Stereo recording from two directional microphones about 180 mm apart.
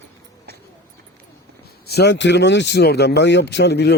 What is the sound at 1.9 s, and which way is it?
Speech, 70° left (ahead or behind).